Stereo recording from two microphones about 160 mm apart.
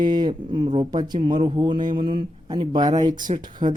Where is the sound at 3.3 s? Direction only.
45° right (ahead or behind).